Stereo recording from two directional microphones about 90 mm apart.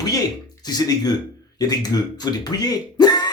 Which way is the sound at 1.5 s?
45° left (ahead or behind).